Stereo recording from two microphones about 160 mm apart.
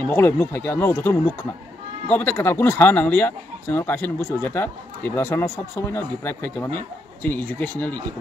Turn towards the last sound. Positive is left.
turn(degrees=10)  # may be behind; listen again after turning